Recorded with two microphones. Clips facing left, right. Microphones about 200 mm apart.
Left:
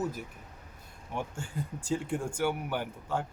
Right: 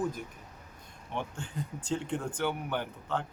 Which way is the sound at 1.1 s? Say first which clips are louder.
Left 1 dB; 10° left (ahead or behind).